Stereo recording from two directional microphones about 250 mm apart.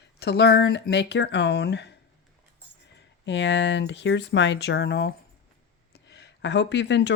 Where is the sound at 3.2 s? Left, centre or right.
Left.